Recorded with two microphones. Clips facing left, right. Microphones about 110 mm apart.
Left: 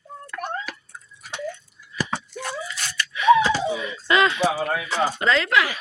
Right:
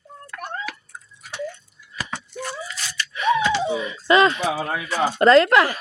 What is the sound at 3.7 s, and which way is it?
Speech, 25° right (ahead or behind).